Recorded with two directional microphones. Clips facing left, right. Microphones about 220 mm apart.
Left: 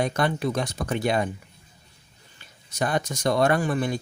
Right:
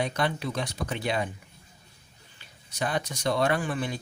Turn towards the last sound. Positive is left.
turn(degrees=45)  # may be behind; listen again after turning